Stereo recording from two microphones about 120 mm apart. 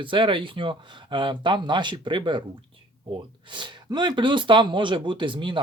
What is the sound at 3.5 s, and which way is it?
Speech, 40° right (ahead or behind).